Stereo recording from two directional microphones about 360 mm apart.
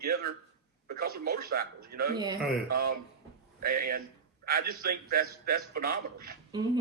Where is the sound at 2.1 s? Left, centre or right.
Centre.